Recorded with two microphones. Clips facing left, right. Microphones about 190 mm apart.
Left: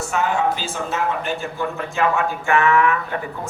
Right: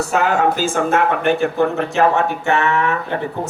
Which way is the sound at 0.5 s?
45° right (ahead or behind).